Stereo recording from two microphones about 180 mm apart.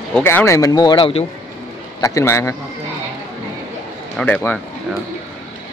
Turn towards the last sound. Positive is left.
turn(degrees=10)  # may be behind; listen again after turning